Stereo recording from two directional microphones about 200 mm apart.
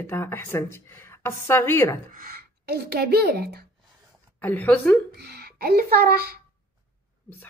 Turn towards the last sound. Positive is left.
turn(degrees=-50)  # may be behind; listen again after turning